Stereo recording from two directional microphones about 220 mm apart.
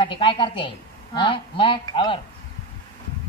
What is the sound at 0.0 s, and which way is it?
A woman's voice, 20° left (ahead or behind).